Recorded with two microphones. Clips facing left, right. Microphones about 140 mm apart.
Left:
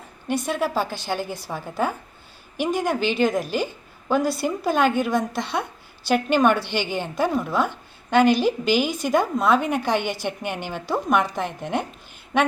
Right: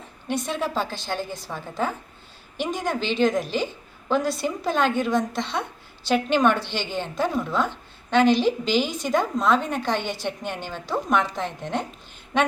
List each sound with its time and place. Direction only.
0.3 s a woman's voice: 5° left (ahead or behind)